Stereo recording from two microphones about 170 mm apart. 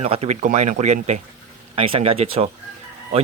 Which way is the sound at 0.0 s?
40° right (ahead or behind).